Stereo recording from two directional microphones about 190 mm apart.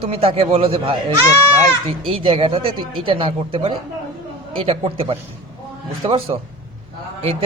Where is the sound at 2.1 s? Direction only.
30° right (ahead or behind).